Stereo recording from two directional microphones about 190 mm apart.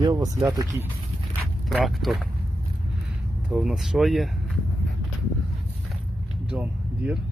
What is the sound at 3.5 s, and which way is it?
Speech, centre (ahead or behind).